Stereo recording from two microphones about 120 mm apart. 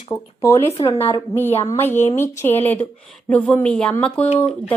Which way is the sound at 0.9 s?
50° left (ahead or behind).